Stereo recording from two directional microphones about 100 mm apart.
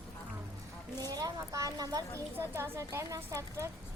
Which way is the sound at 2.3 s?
25° right (ahead or behind).